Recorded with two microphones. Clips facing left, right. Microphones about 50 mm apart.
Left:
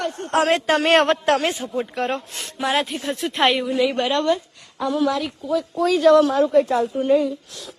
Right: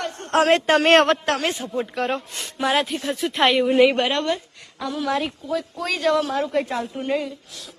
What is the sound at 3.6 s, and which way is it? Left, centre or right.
Speech, right.